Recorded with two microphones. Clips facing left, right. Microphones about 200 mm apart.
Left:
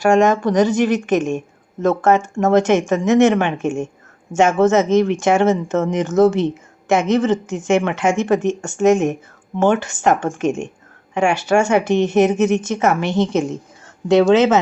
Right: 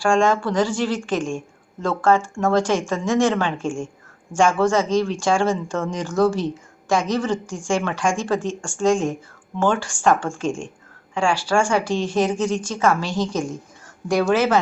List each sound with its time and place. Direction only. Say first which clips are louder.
0.0 s speech: left 4 dB; 20° left (ahead or behind)